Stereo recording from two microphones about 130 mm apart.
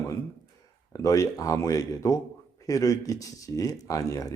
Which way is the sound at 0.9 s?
25° left (ahead or behind).